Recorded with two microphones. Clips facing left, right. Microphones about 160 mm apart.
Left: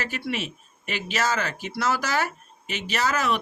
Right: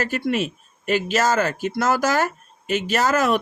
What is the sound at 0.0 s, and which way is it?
Speech, 45° right (ahead or behind).